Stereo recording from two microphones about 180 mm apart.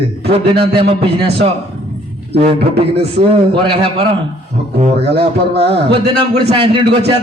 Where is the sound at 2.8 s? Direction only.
30° right (ahead or behind).